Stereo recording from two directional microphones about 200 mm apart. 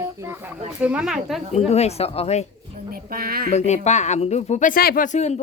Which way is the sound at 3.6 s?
35° left (ahead or behind).